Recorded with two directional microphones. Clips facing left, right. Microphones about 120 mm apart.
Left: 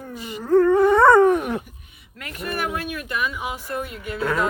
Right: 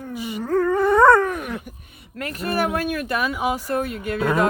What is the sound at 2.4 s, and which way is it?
Speech, 40° right (ahead or behind).